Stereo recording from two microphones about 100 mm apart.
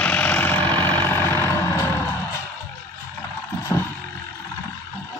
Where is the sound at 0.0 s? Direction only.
15° left (ahead or behind).